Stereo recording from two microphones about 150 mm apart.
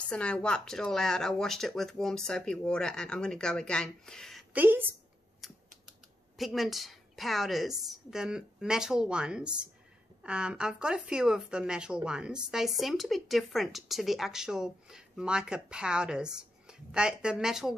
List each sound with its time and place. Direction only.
0.1 s speech: 5° left (ahead or behind)
4.6 s a woman's voice: 15° right (ahead or behind)
5.4 s typing: centre (ahead or behind)
6.3 s speech: centre (ahead or behind)